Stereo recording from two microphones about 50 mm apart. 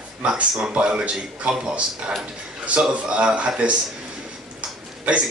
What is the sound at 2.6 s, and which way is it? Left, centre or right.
A man's voice, right.